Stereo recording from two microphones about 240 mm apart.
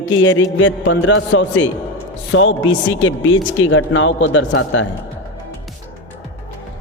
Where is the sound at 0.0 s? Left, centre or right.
Left.